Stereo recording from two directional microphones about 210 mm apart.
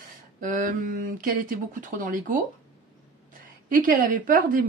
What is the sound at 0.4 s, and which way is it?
Speech, 40° right (ahead or behind).